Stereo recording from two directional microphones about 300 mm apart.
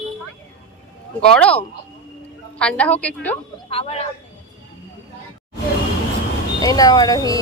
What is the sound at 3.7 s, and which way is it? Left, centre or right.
Speech, centre.